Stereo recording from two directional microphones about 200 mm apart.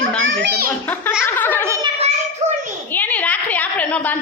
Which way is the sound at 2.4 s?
35° right (ahead or behind).